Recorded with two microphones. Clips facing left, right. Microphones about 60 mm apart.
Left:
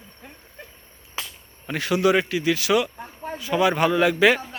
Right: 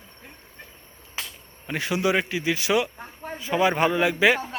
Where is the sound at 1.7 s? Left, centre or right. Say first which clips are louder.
Left 4 dB; centre.